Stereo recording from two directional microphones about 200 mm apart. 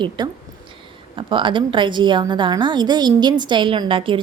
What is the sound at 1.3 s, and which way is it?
A woman's voice, 25° right (ahead or behind).